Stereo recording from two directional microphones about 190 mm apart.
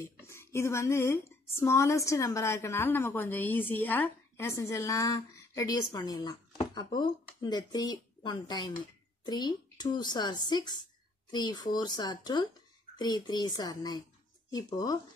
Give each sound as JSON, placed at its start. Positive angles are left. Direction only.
{"t": 0.0, "sound": "a woman's voice", "side_deg": 15}